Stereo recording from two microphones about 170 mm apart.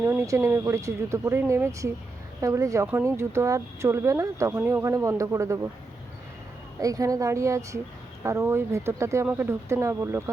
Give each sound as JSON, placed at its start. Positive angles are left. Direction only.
{"t": 0.0, "sound": "speech", "side_deg": -15}
{"t": 6.7, "sound": "a woman's voice", "side_deg": -20}